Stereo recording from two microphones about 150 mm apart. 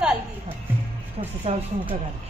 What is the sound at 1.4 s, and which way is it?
Speech, 45° right (ahead or behind).